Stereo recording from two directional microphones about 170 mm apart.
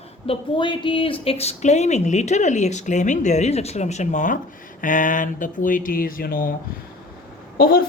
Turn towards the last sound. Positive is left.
turn(degrees=60)  # may be behind; listen again after turning